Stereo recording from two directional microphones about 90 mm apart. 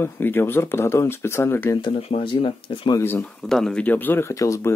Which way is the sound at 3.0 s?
20° left (ahead or behind).